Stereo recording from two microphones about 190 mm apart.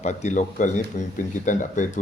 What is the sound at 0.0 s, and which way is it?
Speech, 40° left (ahead or behind).